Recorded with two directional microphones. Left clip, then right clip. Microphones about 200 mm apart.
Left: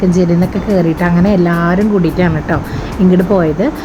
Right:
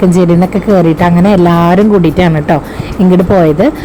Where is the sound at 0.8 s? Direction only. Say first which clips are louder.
Right 4 dB; 25° right (ahead or behind).